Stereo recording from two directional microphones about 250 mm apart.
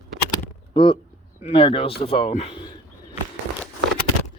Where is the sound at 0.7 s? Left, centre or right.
Centre.